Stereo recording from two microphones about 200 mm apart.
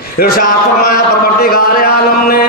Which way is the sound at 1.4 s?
50° left (ahead or behind).